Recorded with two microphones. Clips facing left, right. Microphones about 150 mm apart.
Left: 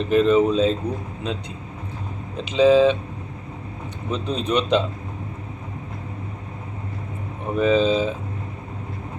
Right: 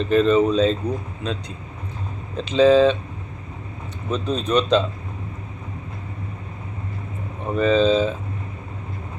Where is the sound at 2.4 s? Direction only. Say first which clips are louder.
Right 1 dB; 10° left (ahead or behind).